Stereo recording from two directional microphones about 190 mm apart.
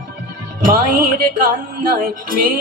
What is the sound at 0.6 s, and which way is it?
Music, 45° right (ahead or behind).